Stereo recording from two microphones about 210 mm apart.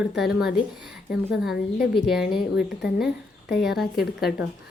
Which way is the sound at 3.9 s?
50° left (ahead or behind).